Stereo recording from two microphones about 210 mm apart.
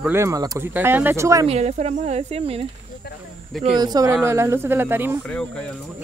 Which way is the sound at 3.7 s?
20° right (ahead or behind).